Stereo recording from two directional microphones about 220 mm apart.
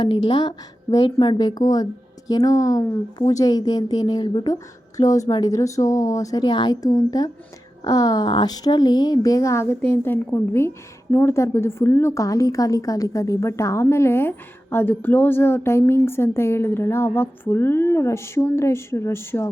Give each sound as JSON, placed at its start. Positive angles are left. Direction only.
{"t": 0.0, "sound": "a woman's voice", "side_deg": 20}